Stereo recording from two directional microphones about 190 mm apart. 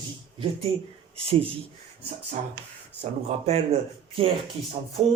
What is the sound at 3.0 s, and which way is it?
Speech, 30° right (ahead or behind).